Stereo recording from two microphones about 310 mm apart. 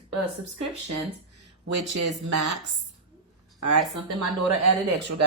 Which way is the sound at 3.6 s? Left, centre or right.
Right.